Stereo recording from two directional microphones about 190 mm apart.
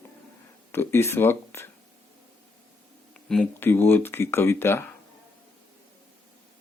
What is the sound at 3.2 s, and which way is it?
Speech, 5° left (ahead or behind).